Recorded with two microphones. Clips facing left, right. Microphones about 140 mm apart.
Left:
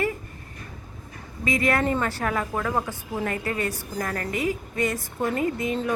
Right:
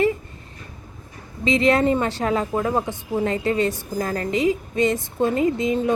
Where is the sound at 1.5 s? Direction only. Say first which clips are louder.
Right 5 dB; 25° right (ahead or behind).